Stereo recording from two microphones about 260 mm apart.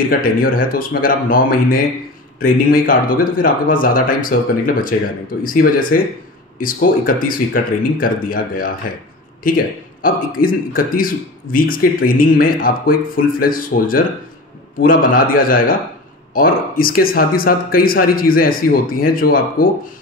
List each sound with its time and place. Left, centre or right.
0.2 s a man's voice: left